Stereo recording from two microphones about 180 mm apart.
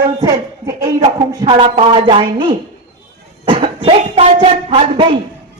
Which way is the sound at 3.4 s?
30° right (ahead or behind).